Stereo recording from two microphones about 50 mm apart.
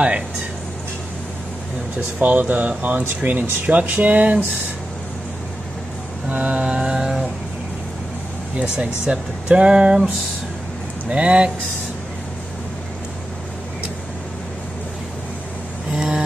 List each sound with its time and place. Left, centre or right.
2.1 s speech: right
6.2 s a sound: right; by 7.2 s centre
8.5 s speech: centre
11.1 s speech: right
15.9 s vehicle: centre